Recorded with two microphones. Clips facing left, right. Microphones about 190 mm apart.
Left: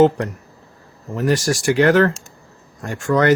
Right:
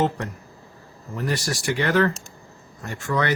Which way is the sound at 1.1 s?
45° left (ahead or behind).